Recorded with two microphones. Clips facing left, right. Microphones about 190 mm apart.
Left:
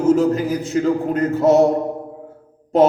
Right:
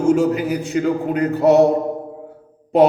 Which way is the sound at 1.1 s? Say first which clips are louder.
Right 2 dB; 65° right (ahead or behind).